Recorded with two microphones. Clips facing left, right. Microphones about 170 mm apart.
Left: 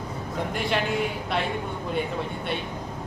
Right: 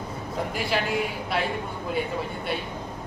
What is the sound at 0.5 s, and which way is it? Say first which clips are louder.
Speech: left 1 dB; centre (ahead or behind).